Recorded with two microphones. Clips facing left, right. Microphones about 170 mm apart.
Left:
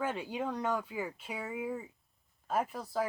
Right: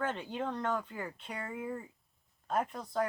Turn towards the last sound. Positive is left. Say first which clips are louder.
# even
turn(degrees=5)  # may be behind; listen again after turning